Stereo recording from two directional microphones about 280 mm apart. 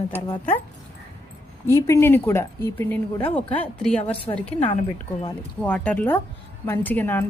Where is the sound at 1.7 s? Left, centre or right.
Centre.